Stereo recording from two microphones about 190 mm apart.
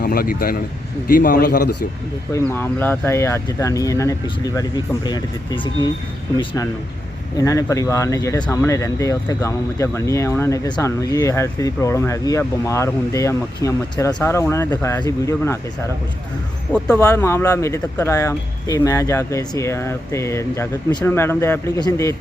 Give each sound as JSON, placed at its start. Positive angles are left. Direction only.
{"t": 0.0, "sound": "a man's voice", "side_deg": 50}
{"t": 2.3, "sound": "speech", "side_deg": 10}
{"t": 16.7, "sound": "speech", "side_deg": 5}